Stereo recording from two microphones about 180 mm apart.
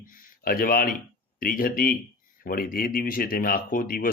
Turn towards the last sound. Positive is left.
turn(degrees=50)  # may be behind; listen again after turning